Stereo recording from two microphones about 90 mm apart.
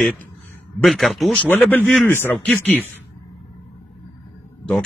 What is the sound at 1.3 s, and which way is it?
A man's voice, 20° left (ahead or behind).